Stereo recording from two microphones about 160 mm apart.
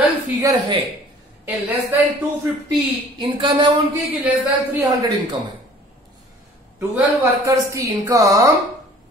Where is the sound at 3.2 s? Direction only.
30° right (ahead or behind).